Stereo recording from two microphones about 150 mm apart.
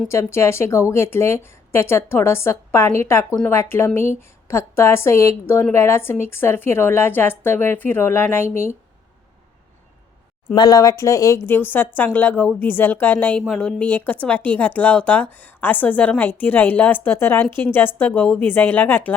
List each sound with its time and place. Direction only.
0.1 s speech: 20° left (ahead or behind)
10.5 s speech: 30° left (ahead or behind); by 19.1 s 15° left (ahead or behind)